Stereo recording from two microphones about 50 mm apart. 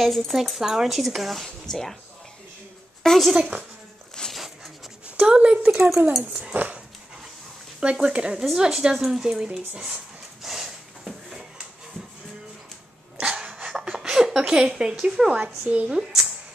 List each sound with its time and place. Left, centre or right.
0.0 s speech: centre
3.0 s speech: centre
3.3 s stir: right
4.2 s a sound: centre
5.2 s speech: centre
6.5 s speech: right
7.8 s stir: right
8.5 s speech: centre
10.4 s a sound: centre
13.2 s dog: right
13.7 s speech: centre
15.4 s stir: right